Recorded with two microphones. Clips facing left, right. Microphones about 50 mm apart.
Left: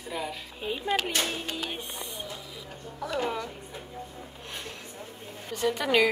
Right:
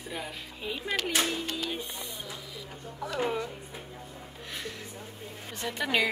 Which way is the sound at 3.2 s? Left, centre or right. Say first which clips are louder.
Right 3 dB; centre.